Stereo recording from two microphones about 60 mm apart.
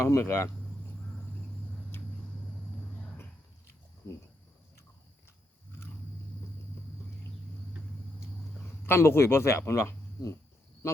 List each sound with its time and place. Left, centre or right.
0.0 s speech: left
8.9 s speech: left